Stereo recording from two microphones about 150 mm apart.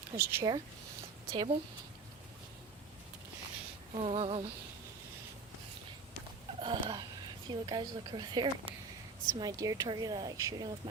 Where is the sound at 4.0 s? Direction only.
40° right (ahead or behind).